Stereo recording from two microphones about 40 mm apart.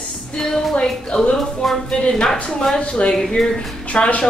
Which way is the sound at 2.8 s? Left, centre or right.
Left.